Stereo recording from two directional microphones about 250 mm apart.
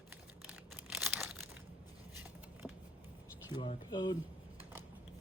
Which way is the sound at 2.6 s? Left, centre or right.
Centre.